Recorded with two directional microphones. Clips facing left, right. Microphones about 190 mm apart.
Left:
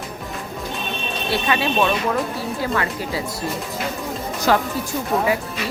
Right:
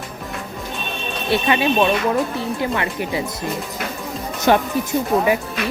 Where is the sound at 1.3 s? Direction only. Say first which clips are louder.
Right 4 dB; 20° right (ahead or behind).